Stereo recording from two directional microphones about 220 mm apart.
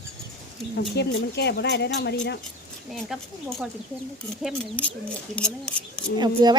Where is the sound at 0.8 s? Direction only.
50° left (ahead or behind).